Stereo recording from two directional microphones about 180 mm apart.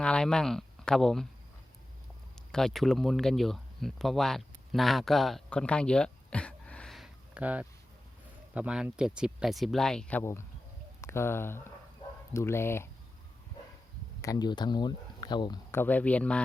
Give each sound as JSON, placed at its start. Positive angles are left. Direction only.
{"t": 0.0, "sound": "speech", "side_deg": 5}
{"t": 2.3, "sound": "speech", "side_deg": 5}
{"t": 14.2, "sound": "speech", "side_deg": 20}
{"t": 15.7, "sound": "speech", "side_deg": 10}